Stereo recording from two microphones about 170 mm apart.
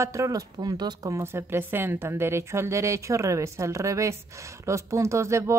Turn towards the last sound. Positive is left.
turn(degrees=-15)  # may be behind; listen again after turning